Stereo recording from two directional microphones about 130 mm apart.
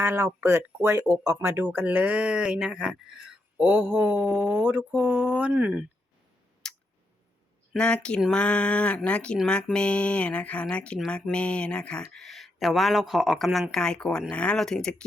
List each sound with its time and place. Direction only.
0.0 s speech: 15° right (ahead or behind)
6.6 s clicking: 5° left (ahead or behind)
7.7 s speech: 10° left (ahead or behind)